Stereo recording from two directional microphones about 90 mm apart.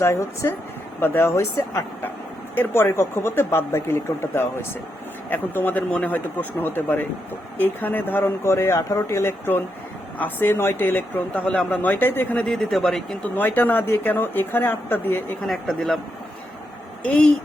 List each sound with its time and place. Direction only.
0.0 s speech: 30° left (ahead or behind)
2.6 s speech: 25° left (ahead or behind)
12.5 s speech: centre (ahead or behind)
13.3 s speech: 20° left (ahead or behind)
15.4 s speech: 5° left (ahead or behind)
17.0 s speech: 15° left (ahead or behind)